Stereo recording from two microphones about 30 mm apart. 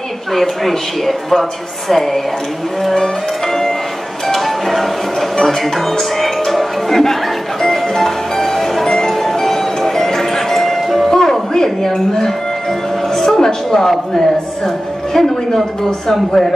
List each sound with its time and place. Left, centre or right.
0.3 s a woman's voice: centre
2.8 s music: centre
5.3 s speech: centre
7.8 s music: centre
11.1 s music: centre
11.5 s a woman's voice: centre
13.4 s speech: centre